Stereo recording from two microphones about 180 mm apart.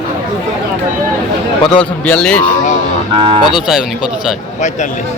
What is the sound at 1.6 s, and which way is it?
Speech, 25° left (ahead or behind).